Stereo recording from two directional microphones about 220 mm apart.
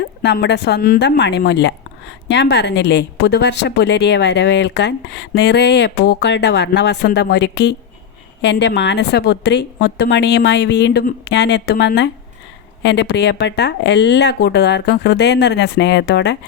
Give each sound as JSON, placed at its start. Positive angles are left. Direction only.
{"t": 0.2, "sound": "speech", "side_deg": 50}